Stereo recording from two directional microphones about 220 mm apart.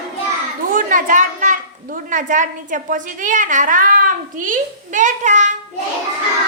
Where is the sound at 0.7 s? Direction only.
35° right (ahead or behind).